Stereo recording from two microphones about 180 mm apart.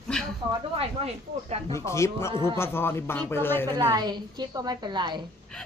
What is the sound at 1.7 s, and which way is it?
A man's voice, 15° left (ahead or behind).